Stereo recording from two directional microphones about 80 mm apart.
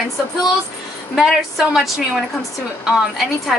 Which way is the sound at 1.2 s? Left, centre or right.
Centre.